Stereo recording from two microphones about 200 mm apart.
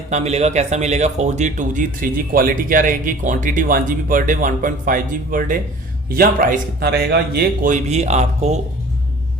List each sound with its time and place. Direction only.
0.1 s speech: 35° right (ahead or behind)